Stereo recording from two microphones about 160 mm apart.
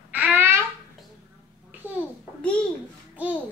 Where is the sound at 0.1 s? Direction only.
10° right (ahead or behind).